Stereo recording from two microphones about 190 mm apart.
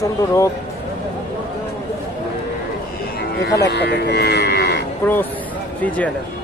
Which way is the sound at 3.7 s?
60° left (ahead or behind).